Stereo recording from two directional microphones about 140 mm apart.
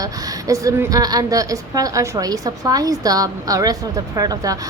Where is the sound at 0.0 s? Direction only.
25° right (ahead or behind).